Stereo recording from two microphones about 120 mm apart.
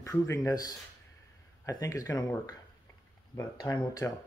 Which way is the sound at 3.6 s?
35° left (ahead or behind).